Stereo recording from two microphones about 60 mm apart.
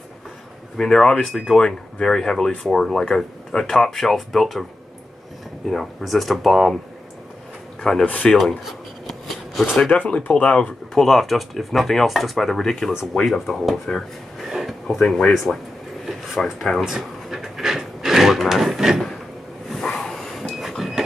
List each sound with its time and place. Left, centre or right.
0.7 s speech: centre
5.7 s speech: centre
8.0 s speech: left
9.6 s speech: centre
11.0 s speech: centre
14.5 s a sound: centre
15.3 s speech: centre
16.1 s a sound: centre
19.7 s a sound: centre